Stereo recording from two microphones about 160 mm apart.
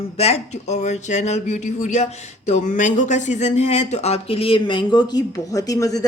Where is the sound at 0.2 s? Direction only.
40° left (ahead or behind).